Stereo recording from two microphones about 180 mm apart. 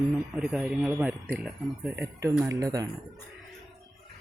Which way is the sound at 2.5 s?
20° right (ahead or behind).